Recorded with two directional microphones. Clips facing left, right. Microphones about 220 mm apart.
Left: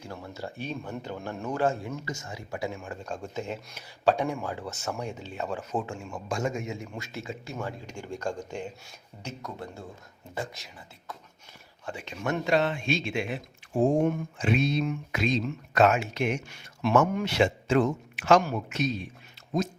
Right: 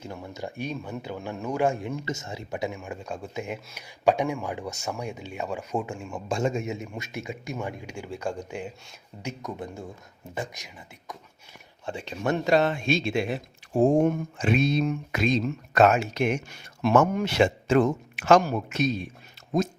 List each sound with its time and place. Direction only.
0.0 s speech: 15° right (ahead or behind)
6.2 s speech: 25° right (ahead or behind)
11.9 s a man's voice: 30° right (ahead or behind); by 18.9 s 45° right (ahead or behind)